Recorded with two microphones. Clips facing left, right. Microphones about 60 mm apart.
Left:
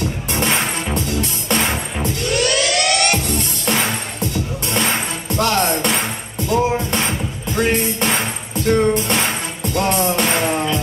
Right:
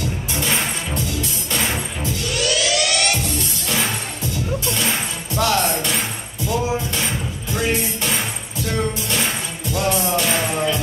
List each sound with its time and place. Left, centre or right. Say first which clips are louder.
0.3 s music: left 4 dB; left